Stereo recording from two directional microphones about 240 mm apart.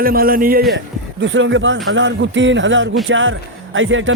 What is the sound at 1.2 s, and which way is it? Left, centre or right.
A man's voice, right.